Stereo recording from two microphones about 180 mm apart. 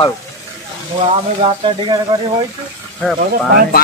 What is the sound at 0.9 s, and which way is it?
Speech, 35° right (ahead or behind).